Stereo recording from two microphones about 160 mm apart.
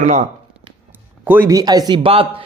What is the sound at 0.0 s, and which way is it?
Speech, 50° right (ahead or behind).